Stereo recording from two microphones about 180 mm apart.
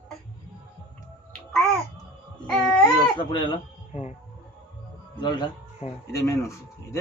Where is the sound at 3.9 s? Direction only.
40° left (ahead or behind).